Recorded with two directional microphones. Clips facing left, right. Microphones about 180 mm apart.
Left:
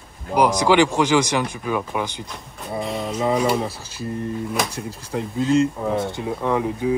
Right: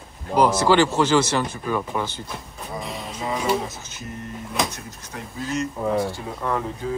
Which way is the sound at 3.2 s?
30° left (ahead or behind).